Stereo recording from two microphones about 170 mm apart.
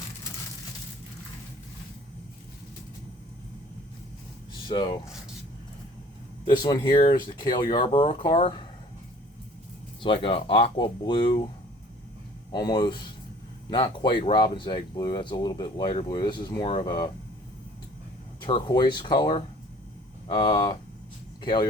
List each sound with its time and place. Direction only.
4.7 s speech: 25° left (ahead or behind)
6.6 s speech: 25° left (ahead or behind)
10.0 s speech: 30° left (ahead or behind)
12.5 s speech: 25° left (ahead or behind)
18.4 s speech: 25° left (ahead or behind)